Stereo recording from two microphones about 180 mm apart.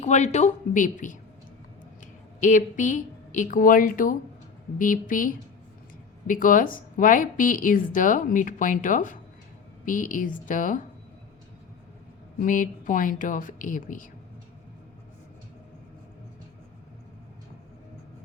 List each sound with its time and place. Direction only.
0.0 s a woman's voice: 40° left (ahead or behind)
2.4 s a woman's voice: 45° left (ahead or behind)
12.4 s a woman's voice: 45° left (ahead or behind)